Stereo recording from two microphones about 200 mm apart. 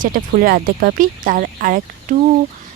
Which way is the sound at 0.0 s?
45° right (ahead or behind).